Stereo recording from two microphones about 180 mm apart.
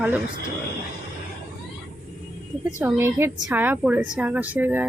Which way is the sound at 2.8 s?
15° right (ahead or behind).